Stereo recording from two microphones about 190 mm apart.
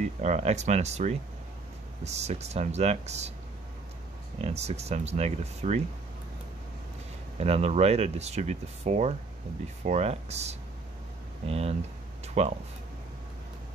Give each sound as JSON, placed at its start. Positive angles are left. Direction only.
{"t": 0.0, "sound": "speech", "side_deg": -40}
{"t": 4.4, "sound": "speech", "side_deg": -35}
{"t": 7.3, "sound": "speech", "side_deg": -35}